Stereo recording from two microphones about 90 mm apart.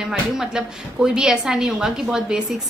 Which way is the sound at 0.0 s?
5° right (ahead or behind).